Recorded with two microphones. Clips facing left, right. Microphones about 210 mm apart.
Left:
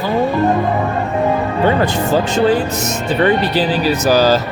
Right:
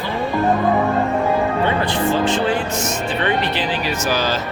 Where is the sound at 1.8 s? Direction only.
40° left (ahead or behind).